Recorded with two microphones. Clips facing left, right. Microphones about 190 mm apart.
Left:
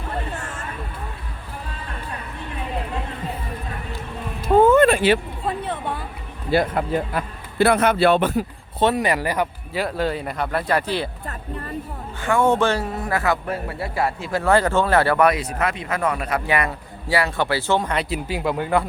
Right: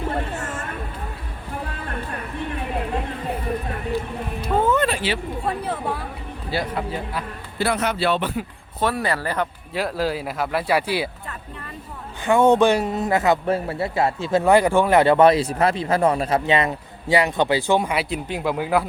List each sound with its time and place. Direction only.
4.6 s a sound: 50° left (ahead or behind)
5.5 s speech: centre (ahead or behind)
6.5 s a man's voice: 55° left (ahead or behind)
8.8 s speech: 20° left (ahead or behind)
9.7 s speech: centre (ahead or behind)
12.2 s a man's voice: 20° right (ahead or behind)
18.1 s speech: centre (ahead or behind)